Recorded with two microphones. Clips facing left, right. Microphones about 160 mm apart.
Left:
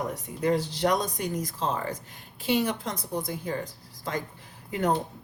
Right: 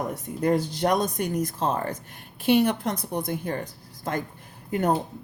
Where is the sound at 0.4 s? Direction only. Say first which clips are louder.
Right 2 dB; 50° right (ahead or behind).